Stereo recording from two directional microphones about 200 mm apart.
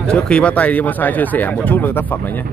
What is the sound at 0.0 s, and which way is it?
Speech, 5° left (ahead or behind).